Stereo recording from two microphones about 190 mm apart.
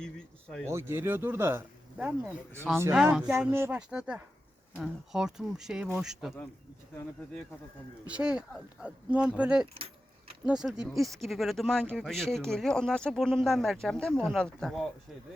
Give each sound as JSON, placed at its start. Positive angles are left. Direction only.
{"t": 0.0, "sound": "speech", "side_deg": 5}
{"t": 0.6, "sound": "speech", "side_deg": -15}
{"t": 8.0, "sound": "speech", "side_deg": -5}
{"t": 9.7, "sound": "keys jangling", "side_deg": -30}
{"t": 10.4, "sound": "speech", "side_deg": -5}